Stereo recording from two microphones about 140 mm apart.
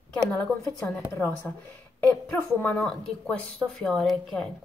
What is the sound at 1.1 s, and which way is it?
Speech, 20° left (ahead or behind).